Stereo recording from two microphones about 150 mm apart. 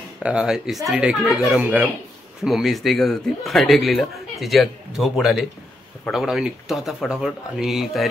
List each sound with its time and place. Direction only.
0.2 s speech: 5° right (ahead or behind)